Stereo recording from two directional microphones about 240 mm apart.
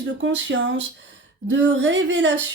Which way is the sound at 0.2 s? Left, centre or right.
Right.